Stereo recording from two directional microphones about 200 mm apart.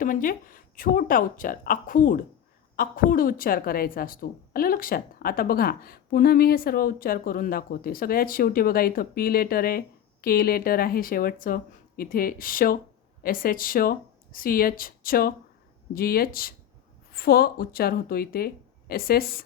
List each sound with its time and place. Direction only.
0.0 s a woman's voice: 40° left (ahead or behind)